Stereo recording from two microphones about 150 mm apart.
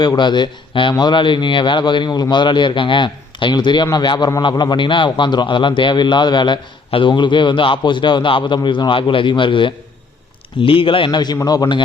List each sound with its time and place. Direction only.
0.0 s a man's voice: 30° left (ahead or behind)